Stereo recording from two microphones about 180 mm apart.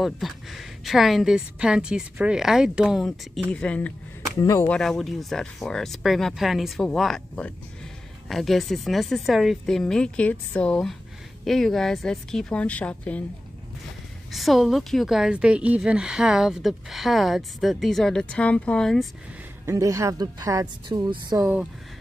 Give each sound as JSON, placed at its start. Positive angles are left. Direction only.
{"t": 0.0, "sound": "a woman's voice", "side_deg": 0}
{"t": 4.7, "sound": "a woman's voice", "side_deg": 0}
{"t": 14.3, "sound": "a woman's voice", "side_deg": 0}
{"t": 19.6, "sound": "a woman's voice", "side_deg": -15}